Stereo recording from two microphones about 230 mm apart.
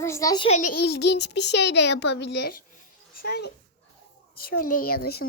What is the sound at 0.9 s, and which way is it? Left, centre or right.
A child's voice, left.